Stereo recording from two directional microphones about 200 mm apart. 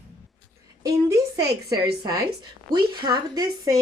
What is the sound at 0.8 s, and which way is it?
A woman's voice, 20° right (ahead or behind).